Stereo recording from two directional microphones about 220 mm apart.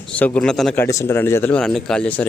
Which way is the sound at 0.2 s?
5° left (ahead or behind).